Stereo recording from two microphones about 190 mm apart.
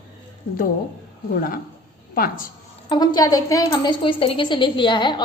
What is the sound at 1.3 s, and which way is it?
A woman's voice, 50° left (ahead or behind).